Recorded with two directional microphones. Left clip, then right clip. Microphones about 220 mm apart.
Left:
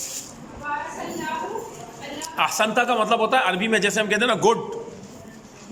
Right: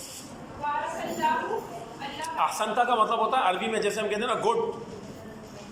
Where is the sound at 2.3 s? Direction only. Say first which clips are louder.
Left 5 dB; 50° left (ahead or behind).